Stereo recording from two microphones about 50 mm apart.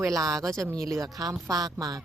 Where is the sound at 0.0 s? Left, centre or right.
Right.